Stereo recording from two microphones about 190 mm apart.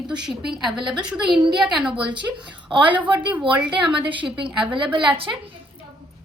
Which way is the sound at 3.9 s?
25° right (ahead or behind).